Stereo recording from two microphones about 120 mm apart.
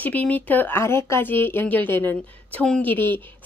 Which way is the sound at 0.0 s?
15° left (ahead or behind).